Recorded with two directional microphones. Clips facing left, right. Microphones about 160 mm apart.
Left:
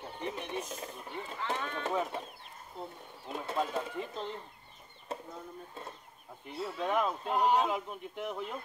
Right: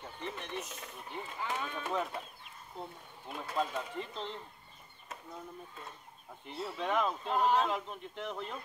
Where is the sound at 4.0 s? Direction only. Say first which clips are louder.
Left 2 dB; 10° left (ahead or behind).